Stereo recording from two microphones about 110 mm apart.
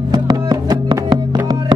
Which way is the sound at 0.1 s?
35° right (ahead or behind).